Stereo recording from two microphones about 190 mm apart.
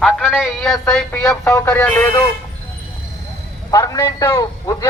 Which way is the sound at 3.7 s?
20° left (ahead or behind).